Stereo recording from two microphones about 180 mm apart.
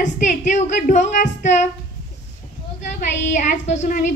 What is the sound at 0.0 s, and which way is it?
A woman's voice, 45° left (ahead or behind).